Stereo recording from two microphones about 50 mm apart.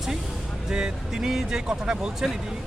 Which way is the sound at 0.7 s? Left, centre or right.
Centre.